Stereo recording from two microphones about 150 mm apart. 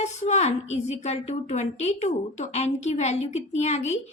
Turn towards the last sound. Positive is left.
turn(degrees=50)  # may be behind; listen again after turning